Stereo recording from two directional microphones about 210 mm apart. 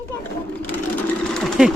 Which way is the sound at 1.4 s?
Centre (ahead or behind).